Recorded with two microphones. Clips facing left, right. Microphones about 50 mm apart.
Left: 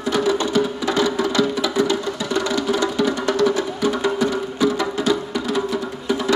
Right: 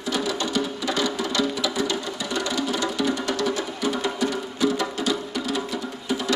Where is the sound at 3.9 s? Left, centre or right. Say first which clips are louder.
Left 4 dB; centre.